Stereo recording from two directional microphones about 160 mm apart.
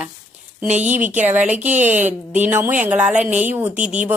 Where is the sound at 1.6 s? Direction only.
45° right (ahead or behind).